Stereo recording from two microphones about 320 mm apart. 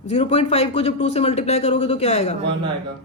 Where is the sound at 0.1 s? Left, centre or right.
Centre.